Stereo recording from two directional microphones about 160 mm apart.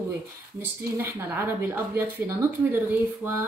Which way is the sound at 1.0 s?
15° right (ahead or behind).